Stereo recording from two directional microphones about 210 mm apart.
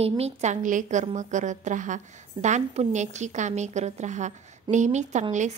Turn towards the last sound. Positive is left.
turn(degrees=-35)  # may be behind; listen again after turning